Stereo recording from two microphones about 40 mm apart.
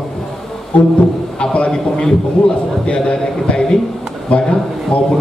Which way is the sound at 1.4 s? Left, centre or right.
Left.